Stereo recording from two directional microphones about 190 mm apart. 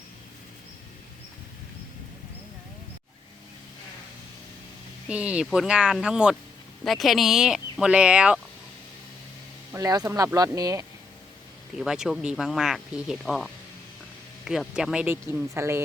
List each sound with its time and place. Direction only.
5.0 s speech: 5° right (ahead or behind)
9.7 s speech: 20° right (ahead or behind)
11.8 s speech: 5° right (ahead or behind)